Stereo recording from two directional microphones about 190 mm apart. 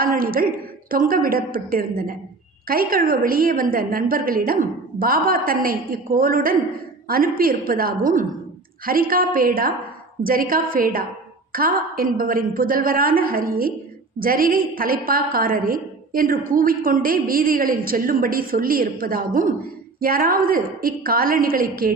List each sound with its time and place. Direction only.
0.0 s a woman's voice: 50° right (ahead or behind)